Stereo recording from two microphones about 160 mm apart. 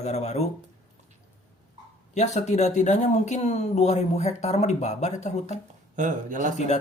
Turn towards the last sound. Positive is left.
turn(degrees=-55)  # may be behind; listen again after turning